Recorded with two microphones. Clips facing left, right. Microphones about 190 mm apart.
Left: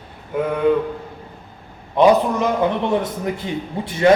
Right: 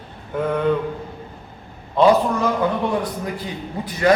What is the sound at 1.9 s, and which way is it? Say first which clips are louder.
A man's voice: left 1 dB; 15° left (ahead or behind).